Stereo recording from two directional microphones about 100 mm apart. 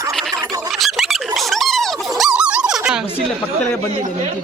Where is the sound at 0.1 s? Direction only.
Centre (ahead or behind).